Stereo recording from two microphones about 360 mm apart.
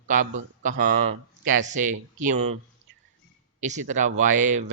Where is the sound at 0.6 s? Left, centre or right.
Right.